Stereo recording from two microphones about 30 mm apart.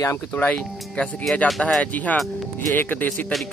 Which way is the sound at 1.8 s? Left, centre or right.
Left.